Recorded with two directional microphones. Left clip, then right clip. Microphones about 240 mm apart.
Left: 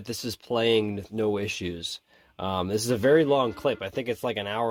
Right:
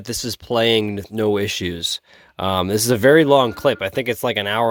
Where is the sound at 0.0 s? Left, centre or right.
Right.